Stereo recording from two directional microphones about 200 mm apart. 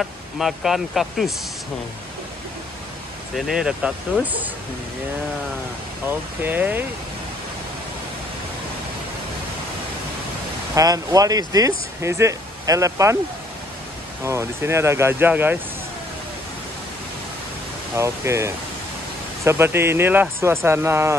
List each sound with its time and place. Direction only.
0.0 s speech: centre (ahead or behind)
3.3 s speech: centre (ahead or behind)
6.0 s speech: 10° right (ahead or behind)
10.7 s speech: 15° right (ahead or behind)
14.2 s speech: 15° right (ahead or behind)
17.9 s speech: 15° right (ahead or behind)